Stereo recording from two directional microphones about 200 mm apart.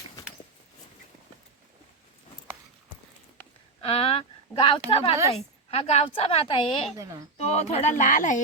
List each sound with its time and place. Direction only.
3.8 s a woman's voice: 30° left (ahead or behind)
6.9 s speech: 15° right (ahead or behind)
7.3 s speech: 30° left (ahead or behind)